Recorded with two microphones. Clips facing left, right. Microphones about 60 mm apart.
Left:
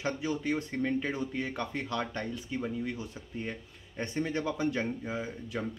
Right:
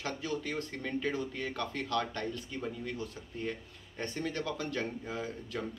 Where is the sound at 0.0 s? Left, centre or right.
Centre.